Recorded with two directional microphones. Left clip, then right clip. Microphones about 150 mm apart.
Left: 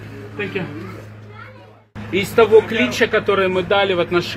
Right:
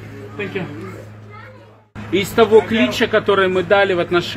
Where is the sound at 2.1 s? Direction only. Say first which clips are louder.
Even; 65° right (ahead or behind).